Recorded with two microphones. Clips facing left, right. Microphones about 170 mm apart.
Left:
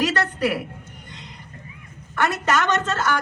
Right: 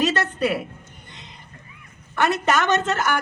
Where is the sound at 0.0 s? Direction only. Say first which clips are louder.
Even; 20° right (ahead or behind).